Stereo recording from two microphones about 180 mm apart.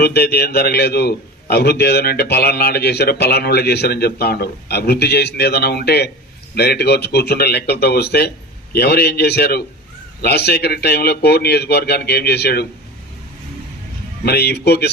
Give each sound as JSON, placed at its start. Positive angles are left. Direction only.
{"t": 0.0, "sound": "a man's voice", "side_deg": 65}
{"t": 14.3, "sound": "a man's voice", "side_deg": 65}